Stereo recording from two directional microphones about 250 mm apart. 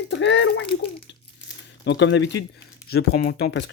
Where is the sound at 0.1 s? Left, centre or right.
Left.